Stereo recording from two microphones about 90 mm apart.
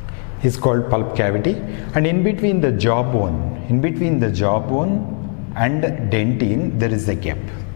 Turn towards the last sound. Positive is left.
turn(degrees=15)  # may be behind; listen again after turning